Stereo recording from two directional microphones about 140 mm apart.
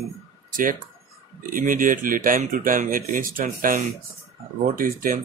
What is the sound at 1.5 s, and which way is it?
Speech, 75° right (ahead or behind).